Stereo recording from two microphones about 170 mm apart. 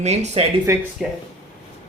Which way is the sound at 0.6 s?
15° right (ahead or behind).